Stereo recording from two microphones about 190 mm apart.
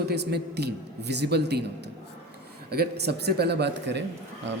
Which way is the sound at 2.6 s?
55° right (ahead or behind).